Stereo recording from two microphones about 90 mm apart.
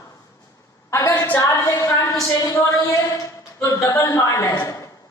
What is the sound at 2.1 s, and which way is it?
Speech, 40° left (ahead or behind).